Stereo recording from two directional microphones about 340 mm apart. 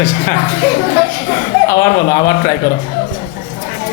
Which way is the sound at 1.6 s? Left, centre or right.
Centre.